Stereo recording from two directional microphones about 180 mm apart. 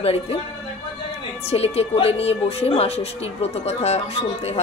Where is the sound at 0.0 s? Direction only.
35° left (ahead or behind).